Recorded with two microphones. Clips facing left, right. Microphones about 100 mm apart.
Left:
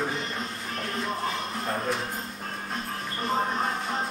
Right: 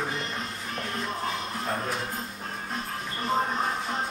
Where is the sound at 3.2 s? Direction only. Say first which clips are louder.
Even; centre (ahead or behind).